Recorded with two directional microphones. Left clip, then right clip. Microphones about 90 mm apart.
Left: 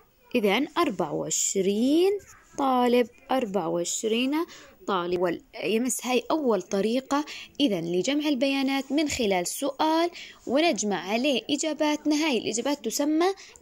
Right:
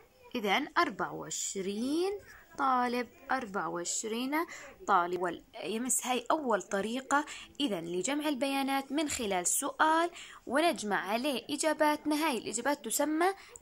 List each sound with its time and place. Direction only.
0.3 s a woman's voice: 40° left (ahead or behind)